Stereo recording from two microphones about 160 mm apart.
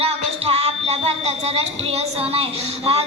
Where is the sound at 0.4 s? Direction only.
40° right (ahead or behind).